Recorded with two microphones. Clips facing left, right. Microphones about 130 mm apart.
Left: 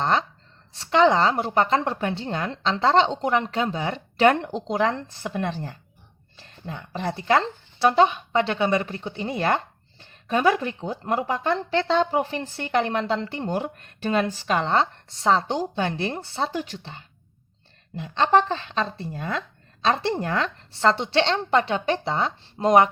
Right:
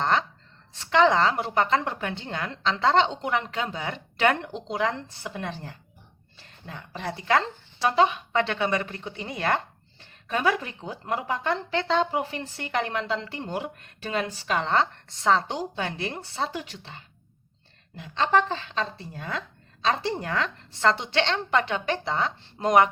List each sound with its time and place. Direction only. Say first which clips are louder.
0.8 s speech: left 2 dB; 30° left (ahead or behind)
6.7 s a woman's voice: left 5 dB; 30° left (ahead or behind)
18.2 s a woman's voice: left 3 dB; 30° left (ahead or behind)